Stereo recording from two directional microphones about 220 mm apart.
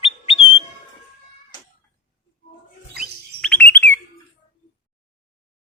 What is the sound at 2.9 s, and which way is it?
Chirp, 5° left (ahead or behind).